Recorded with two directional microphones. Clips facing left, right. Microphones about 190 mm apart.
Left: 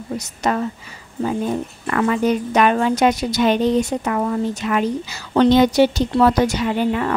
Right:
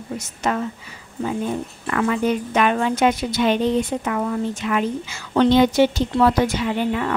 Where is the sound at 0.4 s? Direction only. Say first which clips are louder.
Left 2 dB; 40° left (ahead or behind).